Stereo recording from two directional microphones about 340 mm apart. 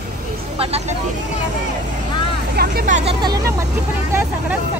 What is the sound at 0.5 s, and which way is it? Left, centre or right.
Speech, centre.